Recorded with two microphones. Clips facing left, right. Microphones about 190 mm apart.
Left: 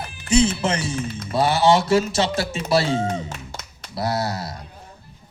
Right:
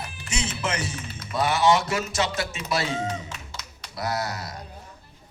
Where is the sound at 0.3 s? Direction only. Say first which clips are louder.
Left 11 dB; 30° left (ahead or behind).